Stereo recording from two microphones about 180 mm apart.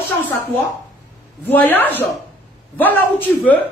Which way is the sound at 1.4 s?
10° left (ahead or behind).